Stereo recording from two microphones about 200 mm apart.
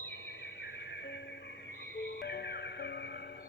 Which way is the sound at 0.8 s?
60° left (ahead or behind).